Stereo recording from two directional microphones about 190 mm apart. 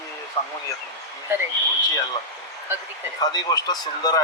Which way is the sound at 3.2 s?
20° left (ahead or behind).